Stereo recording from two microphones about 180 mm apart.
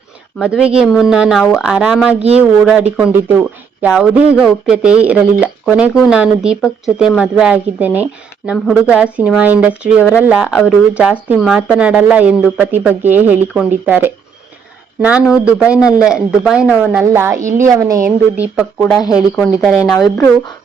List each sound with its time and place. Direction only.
0.3 s speech: 5° right (ahead or behind)
18.8 s speech: 5° left (ahead or behind)